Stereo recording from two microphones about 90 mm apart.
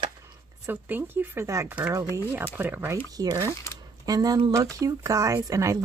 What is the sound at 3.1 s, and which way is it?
Speech, 45° right (ahead or behind).